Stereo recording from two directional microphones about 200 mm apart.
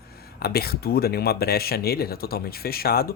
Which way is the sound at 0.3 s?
50° left (ahead or behind).